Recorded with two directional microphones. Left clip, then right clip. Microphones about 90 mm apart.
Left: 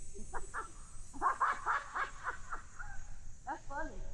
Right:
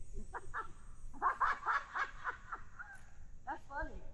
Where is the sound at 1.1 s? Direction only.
45° right (ahead or behind).